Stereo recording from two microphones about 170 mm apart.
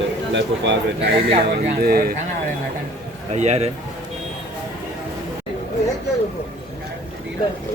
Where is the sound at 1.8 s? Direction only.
60° right (ahead or behind).